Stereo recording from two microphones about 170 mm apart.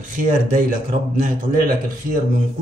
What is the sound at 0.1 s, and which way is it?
Speech, 50° right (ahead or behind).